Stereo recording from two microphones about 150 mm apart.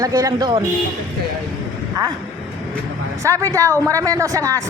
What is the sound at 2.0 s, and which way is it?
Speech, 25° right (ahead or behind).